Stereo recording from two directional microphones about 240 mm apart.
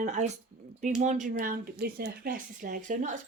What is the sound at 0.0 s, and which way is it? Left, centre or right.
A woman's voice, right.